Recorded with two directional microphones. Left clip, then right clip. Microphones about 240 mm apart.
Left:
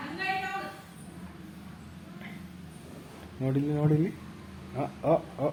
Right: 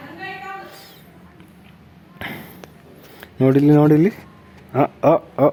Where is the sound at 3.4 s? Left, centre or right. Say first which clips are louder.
Right 17 dB; right.